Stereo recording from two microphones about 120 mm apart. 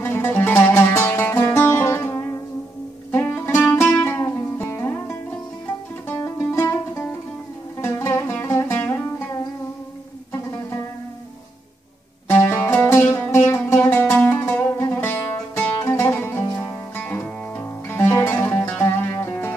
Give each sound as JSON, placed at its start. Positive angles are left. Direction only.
{"t": 0.0, "sound": "music", "side_deg": 15}
{"t": 12.3, "sound": "music", "side_deg": 20}